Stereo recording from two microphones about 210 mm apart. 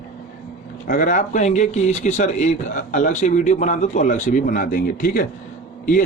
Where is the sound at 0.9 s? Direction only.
40° left (ahead or behind).